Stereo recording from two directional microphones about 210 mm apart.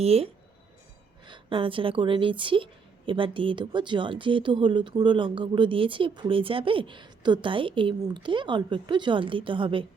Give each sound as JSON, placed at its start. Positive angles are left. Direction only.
{"t": 0.0, "sound": "speech", "side_deg": -30}
{"t": 1.3, "sound": "speech", "side_deg": -25}